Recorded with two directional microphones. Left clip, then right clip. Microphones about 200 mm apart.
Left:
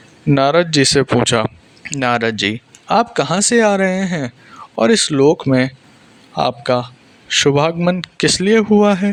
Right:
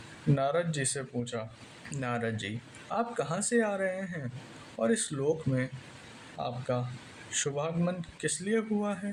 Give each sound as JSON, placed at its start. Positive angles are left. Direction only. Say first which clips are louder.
{"t": 0.3, "sound": "speech", "louder": "left 18 dB", "side_deg": 45}